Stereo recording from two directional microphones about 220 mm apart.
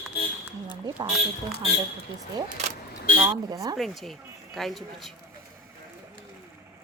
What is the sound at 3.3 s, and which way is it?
Speech, 15° right (ahead or behind).